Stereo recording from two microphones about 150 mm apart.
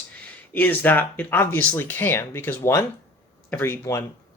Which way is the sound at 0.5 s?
10° left (ahead or behind).